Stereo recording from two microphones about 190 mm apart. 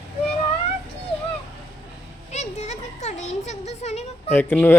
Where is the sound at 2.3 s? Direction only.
35° left (ahead or behind).